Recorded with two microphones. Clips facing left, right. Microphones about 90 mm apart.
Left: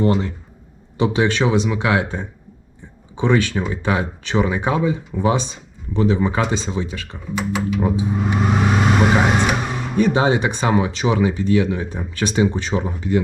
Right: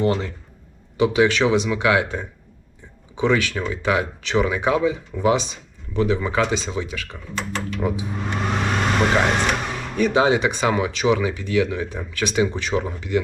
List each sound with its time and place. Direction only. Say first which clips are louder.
0.1 s speech: left 3 dB; 15° left (ahead or behind)
0.9 s speech: right 1 dB; 25° left (ahead or behind)
6.4 s speech: left 1 dB; 15° left (ahead or behind)
8.0 s car: left 6 dB; 5° left (ahead or behind)
10.0 s speech: left 1 dB; 20° left (ahead or behind)